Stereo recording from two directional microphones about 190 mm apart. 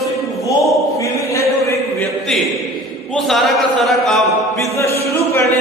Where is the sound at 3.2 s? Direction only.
Centre (ahead or behind).